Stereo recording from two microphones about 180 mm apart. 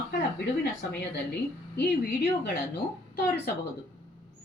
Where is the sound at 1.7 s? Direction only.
65° left (ahead or behind).